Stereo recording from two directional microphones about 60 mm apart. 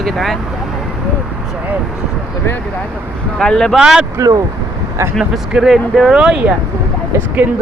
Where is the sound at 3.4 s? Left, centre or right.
Centre.